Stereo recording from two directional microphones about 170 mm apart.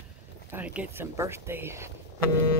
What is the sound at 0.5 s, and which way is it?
Speech, 10° right (ahead or behind).